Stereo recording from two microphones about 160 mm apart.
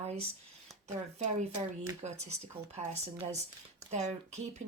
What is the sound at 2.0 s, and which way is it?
Speech, 45° right (ahead or behind).